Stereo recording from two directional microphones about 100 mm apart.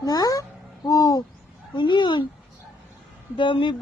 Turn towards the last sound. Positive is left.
turn(degrees=55)  # may be behind; listen again after turning